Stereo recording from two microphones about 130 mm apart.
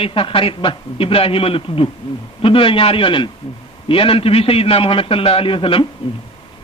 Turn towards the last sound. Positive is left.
turn(degrees=40)  # may be behind; listen again after turning